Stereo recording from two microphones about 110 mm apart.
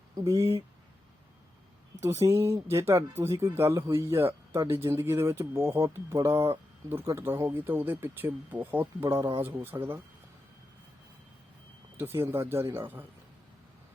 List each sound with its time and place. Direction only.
0.2 s speech: 30° right (ahead or behind)
2.0 s speech: 25° right (ahead or behind)
11.9 s speech: 20° right (ahead or behind)